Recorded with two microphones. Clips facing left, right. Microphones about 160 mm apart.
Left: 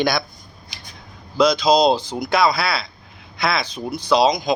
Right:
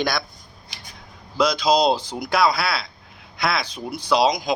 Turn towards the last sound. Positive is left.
turn(degrees=-10)  # may be behind; listen again after turning